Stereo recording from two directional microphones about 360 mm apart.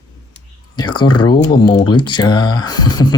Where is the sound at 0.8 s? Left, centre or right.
Centre.